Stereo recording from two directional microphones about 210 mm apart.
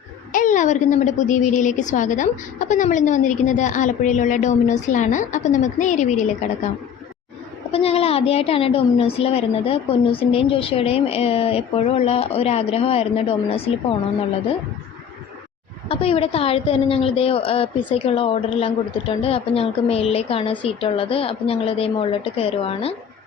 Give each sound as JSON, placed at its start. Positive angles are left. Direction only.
{"t": 0.3, "sound": "a woman's voice", "side_deg": 35}
{"t": 7.7, "sound": "a woman's voice", "side_deg": 30}
{"t": 15.9, "sound": "a woman's voice", "side_deg": 25}